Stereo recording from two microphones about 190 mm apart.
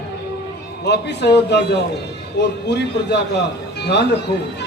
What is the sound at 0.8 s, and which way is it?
A man's voice, 65° left (ahead or behind).